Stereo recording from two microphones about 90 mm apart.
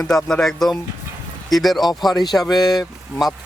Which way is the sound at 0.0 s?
10° left (ahead or behind).